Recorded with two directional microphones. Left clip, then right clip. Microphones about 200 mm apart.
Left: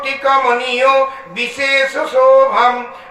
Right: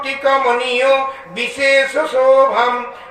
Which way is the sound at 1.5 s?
20° left (ahead or behind).